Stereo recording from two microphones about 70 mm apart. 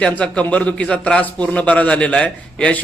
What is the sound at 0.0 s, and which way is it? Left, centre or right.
A man's voice, centre.